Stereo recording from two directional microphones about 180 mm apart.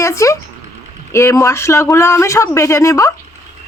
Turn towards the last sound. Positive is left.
turn(degrees=15)  # may be behind; listen again after turning